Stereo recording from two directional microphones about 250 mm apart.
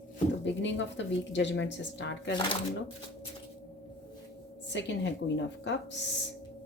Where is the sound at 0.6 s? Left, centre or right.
Left.